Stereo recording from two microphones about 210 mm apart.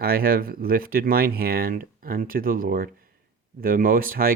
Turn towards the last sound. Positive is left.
turn(degrees=-40)  # may be behind; listen again after turning